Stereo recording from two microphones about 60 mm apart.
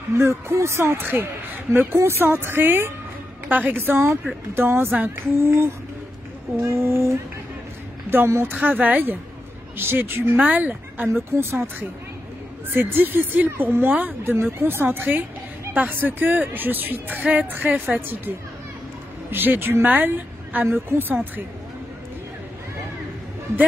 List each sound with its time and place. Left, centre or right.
0.1 s speech: right
8.3 s speech: right
8.5 s speech: right
10.4 s speech: right
11.3 s speech: right
12.7 s speech: right
19.3 s speech: right